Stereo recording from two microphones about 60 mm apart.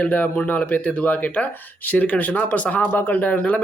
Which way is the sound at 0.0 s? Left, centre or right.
Left.